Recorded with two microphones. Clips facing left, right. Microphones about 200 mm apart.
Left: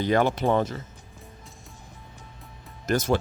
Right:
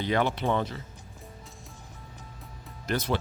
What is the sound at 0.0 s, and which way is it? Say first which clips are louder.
Speech: left 4 dB; 45° left (ahead or behind).